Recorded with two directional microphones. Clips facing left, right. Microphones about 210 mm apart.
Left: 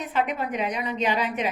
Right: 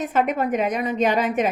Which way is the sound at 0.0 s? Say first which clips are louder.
Right 5 dB; 45° right (ahead or behind).